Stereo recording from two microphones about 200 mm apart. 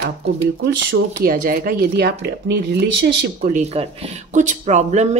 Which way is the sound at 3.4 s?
40° right (ahead or behind).